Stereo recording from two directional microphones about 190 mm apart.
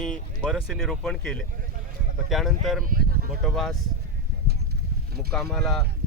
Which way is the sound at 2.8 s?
50° right (ahead or behind).